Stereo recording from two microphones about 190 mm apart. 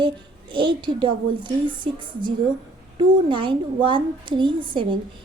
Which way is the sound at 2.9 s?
25° right (ahead or behind).